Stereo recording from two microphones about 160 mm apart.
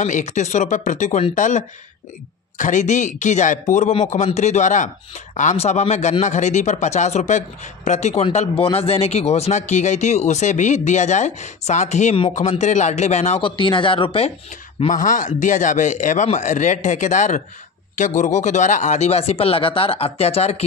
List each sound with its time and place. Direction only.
0.0 s speech: 50° left (ahead or behind)
13.6 s speech: 30° left (ahead or behind)
14.9 s speech: 55° left (ahead or behind)